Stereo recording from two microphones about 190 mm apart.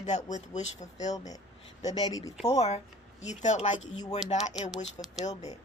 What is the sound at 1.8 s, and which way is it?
Speech, 20° left (ahead or behind).